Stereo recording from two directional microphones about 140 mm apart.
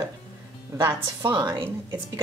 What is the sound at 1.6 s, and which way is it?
Speech, 20° right (ahead or behind).